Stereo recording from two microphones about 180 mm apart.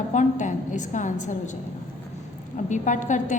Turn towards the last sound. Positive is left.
turn(degrees=45)  # may be behind; listen again after turning